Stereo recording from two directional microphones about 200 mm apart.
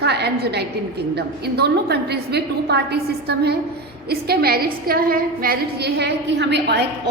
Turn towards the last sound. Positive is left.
turn(degrees=-55)  # may be behind; listen again after turning